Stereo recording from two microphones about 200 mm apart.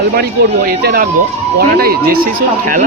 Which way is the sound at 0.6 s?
50° right (ahead or behind).